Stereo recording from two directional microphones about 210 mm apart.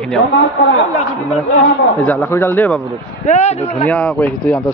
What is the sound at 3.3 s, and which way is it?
Speech, 30° left (ahead or behind).